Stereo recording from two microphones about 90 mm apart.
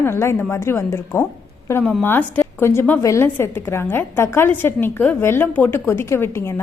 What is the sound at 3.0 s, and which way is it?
Speech, 40° left (ahead or behind).